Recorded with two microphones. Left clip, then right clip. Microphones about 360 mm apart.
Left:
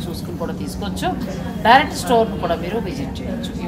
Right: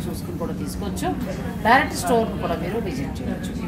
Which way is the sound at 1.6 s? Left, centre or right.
Centre.